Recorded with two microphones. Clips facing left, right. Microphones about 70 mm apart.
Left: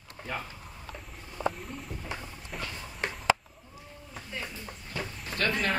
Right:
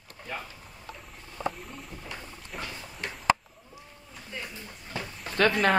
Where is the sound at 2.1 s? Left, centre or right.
Centre.